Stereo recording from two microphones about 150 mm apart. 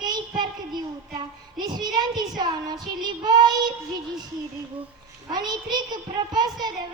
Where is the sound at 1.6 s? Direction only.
25° right (ahead or behind).